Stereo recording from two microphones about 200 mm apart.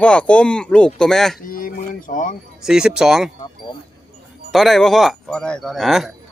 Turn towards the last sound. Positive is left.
turn(degrees=0)  # may be behind; listen again after turning